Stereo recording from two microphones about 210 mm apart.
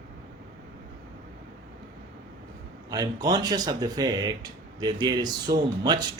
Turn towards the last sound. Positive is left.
turn(degrees=-20)  # may be behind; listen again after turning